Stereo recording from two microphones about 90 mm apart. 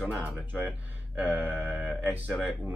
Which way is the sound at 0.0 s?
15° right (ahead or behind).